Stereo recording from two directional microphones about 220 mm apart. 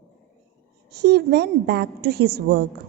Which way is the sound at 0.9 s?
45° right (ahead or behind).